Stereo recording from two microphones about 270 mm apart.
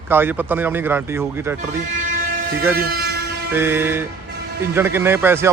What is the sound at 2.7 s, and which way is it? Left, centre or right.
Speech, right.